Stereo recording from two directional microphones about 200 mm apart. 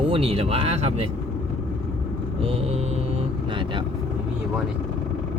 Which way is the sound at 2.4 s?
30° right (ahead or behind).